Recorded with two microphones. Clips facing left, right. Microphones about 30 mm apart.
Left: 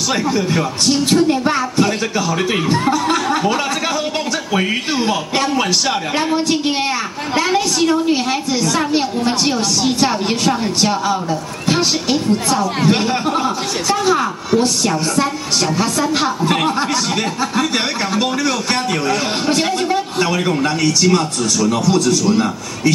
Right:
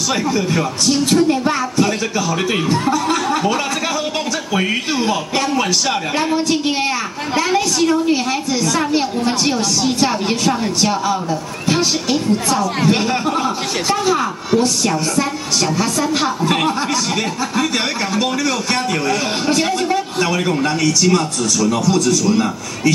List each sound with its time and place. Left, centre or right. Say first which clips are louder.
1.1 s a woman's voice: left 1 dB; centre
5.3 s a woman's voice: left 1 dB; centre
11.8 s speech: left 1 dB; left
12.8 s a woman's voice: left 1 dB; centre
15.8 s a woman's voice: left 1 dB; centre
17.4 s a woman's voice: left 1 dB; left
19.6 s a woman's voice: even; centre
20.8 s a woman's voice: left 1 dB; left
22.2 s a woman's voice: left 1 dB; centre